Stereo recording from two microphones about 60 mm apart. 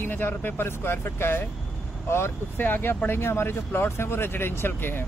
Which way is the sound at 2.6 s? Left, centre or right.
Left.